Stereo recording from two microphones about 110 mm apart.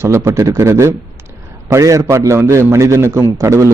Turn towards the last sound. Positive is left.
turn(degrees=-25)  # may be behind; listen again after turning